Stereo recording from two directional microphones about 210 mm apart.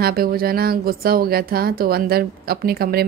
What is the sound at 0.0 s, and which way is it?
Speech, 45° right (ahead or behind).